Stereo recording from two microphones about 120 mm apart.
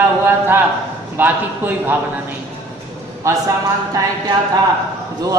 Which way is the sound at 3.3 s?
25° right (ahead or behind).